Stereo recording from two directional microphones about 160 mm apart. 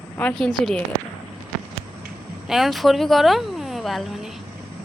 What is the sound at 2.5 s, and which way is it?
Speech, centre (ahead or behind).